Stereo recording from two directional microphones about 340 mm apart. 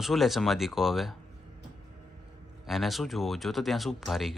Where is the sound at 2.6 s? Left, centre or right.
Centre.